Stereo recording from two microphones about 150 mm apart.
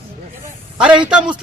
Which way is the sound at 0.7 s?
5° right (ahead or behind).